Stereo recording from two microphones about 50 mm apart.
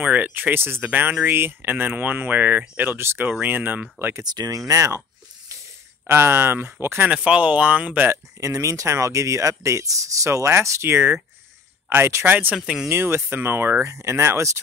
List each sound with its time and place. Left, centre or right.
0.0 s speech: right
4.1 s speech: right
6.0 s speech: right
7.1 s speech: right
8.4 s speech: right
12.3 s speech: right
12.5 s speech: centre
12.8 s speech: right
13.8 s speech: right